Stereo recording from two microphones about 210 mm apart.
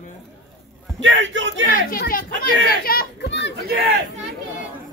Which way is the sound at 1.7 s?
45° left (ahead or behind).